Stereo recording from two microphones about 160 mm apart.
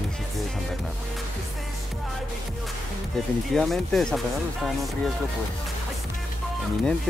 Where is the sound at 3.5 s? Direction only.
Centre (ahead or behind).